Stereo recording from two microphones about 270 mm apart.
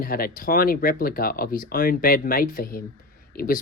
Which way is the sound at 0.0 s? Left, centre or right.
Left.